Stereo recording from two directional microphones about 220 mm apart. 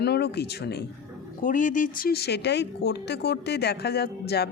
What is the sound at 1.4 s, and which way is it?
Speech, 35° left (ahead or behind).